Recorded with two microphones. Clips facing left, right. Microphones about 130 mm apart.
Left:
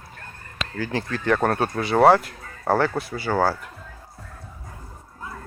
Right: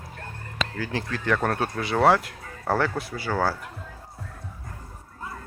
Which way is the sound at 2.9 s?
10° right (ahead or behind).